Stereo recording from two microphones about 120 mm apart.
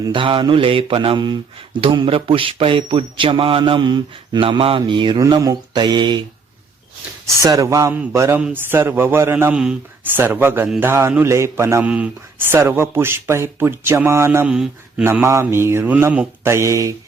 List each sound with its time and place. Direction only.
0.1 s mantra: 45° right (ahead or behind)
5.2 s speech: 25° right (ahead or behind)
5.7 s speech: 40° right (ahead or behind)
7.3 s speech: 30° right (ahead or behind)
9.5 s speech: 5° right (ahead or behind); by 14.4 s 20° right (ahead or behind)
14.4 s speech: 5° right (ahead or behind)
15.0 s speech: 20° right (ahead or behind)